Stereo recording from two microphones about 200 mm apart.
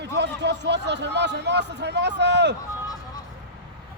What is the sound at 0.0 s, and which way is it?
A man's voice, 60° right (ahead or behind).